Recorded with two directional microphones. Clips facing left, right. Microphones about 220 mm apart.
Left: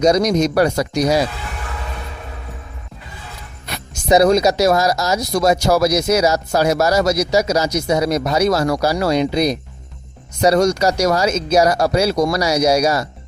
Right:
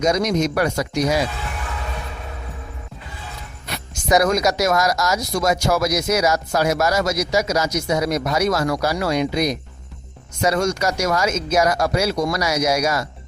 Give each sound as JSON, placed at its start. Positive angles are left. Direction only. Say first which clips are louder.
{"t": 0.0, "sound": "speech", "louder": "left 4 dB", "side_deg": 35}
{"t": 4.1, "sound": "speech", "louder": "left 5 dB", "side_deg": 30}